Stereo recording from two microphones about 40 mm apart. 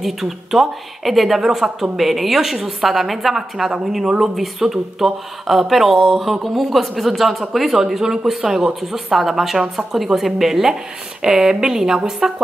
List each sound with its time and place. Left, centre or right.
0.0 s speech: centre